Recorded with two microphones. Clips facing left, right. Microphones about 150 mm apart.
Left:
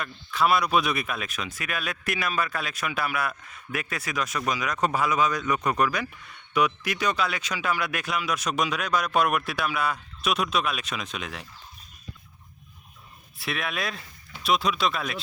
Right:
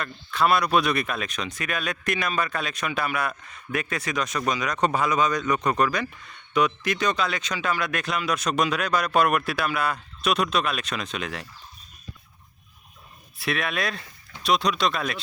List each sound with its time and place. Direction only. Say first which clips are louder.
0.0 s speech: right 1 dB; 5° left (ahead or behind)
13.4 s speech: right 4 dB; centre (ahead or behind)